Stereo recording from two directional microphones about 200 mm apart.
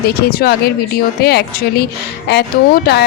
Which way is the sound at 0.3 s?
50° left (ahead or behind).